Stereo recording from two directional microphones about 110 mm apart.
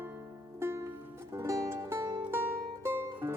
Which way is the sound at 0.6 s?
25° right (ahead or behind).